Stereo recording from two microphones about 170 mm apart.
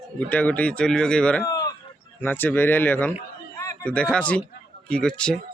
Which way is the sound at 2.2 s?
10° left (ahead or behind).